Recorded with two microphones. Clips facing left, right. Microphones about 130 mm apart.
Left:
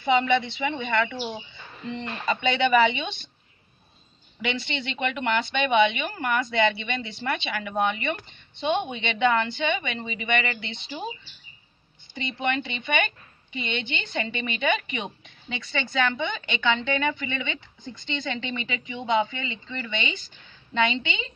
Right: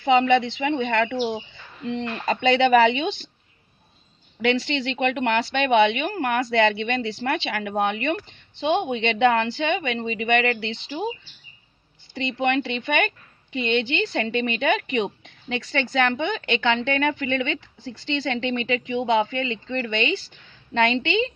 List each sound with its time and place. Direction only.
0.0 s a woman's voice: 90° right; by 1.1 s 65° right (ahead or behind)
1.9 s speech: 75° right (ahead or behind)
4.4 s speech: 90° right
12.1 s a woman's voice: 90° right
15.2 s a sound: 70° right (ahead or behind)
15.9 s a woman's voice: 70° right (ahead or behind)